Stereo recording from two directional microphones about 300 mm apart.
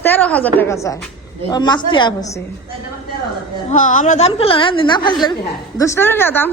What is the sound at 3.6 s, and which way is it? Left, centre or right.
A woman's voice, left.